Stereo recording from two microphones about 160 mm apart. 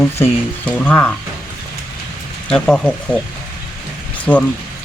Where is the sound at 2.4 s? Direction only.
5° left (ahead or behind).